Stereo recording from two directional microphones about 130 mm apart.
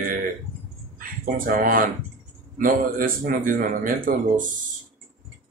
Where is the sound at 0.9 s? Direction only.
90° right.